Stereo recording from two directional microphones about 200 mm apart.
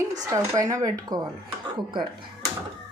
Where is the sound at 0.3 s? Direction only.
15° right (ahead or behind).